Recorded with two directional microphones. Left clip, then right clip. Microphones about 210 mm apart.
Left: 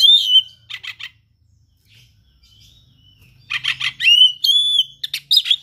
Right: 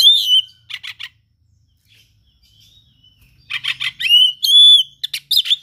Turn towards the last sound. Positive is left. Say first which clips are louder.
# even
turn(degrees=-20)  # may be behind; listen again after turning